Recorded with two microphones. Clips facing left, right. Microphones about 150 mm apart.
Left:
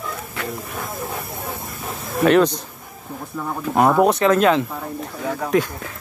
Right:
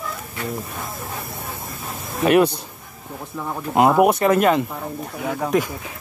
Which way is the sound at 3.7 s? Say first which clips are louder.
Right 1 dB; 10° right (ahead or behind).